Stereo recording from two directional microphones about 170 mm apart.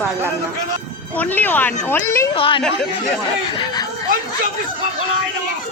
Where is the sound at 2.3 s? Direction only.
30° left (ahead or behind).